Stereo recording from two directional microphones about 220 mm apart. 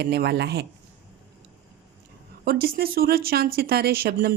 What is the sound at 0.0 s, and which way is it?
Speech, 45° right (ahead or behind).